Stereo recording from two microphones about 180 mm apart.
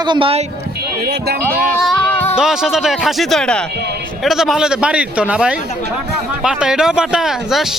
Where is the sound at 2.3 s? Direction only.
5° right (ahead or behind).